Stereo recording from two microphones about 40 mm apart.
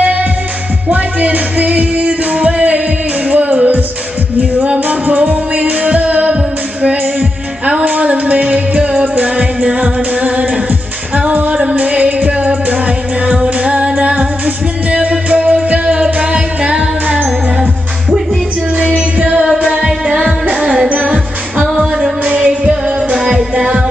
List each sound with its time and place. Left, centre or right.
0.0 s music: right
11.9 s music: right
18.8 s music: right
19.4 s music: centre
19.8 s music of asia: centre
21.1 s music: centre
22.2 s music: right